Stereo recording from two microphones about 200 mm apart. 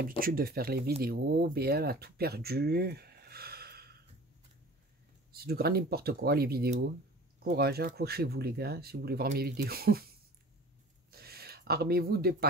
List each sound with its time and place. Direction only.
0.2 s speech: 50° right (ahead or behind)
5.3 s speech: 50° right (ahead or behind)
11.1 s gasp: 50° right (ahead or behind)